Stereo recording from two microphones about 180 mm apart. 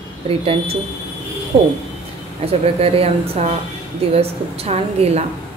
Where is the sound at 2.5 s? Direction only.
35° right (ahead or behind).